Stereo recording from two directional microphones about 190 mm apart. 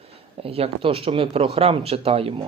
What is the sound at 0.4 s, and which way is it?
Speech, 30° right (ahead or behind).